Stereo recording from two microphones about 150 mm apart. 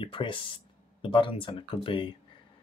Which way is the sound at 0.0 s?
35° left (ahead or behind).